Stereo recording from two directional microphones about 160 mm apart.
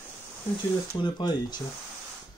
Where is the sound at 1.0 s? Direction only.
30° left (ahead or behind).